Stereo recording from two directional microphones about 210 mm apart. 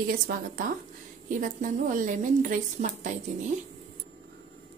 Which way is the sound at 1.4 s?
40° right (ahead or behind).